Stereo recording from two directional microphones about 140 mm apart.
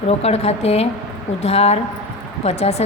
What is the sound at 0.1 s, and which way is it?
Speech, 50° left (ahead or behind).